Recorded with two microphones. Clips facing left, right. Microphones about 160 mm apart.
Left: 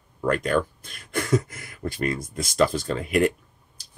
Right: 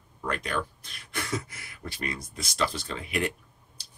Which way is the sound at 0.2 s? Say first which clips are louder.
Left 8 dB; 50° left (ahead or behind).